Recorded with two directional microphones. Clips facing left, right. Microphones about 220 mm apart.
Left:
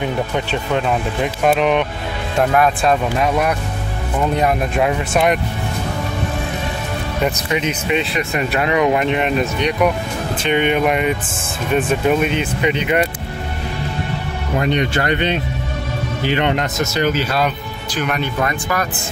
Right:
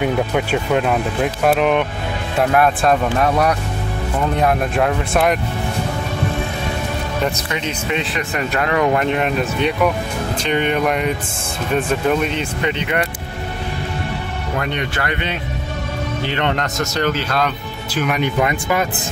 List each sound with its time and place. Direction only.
0.0 s speech: 5° right (ahead or behind)
4.4 s speech: centre (ahead or behind)
8.4 s speech: 15° left (ahead or behind)
10.4 s speech: 5° left (ahead or behind)
14.6 s speech: 20° left (ahead or behind)
16.3 s speech: 10° left (ahead or behind)
17.9 s speech: 5° right (ahead or behind)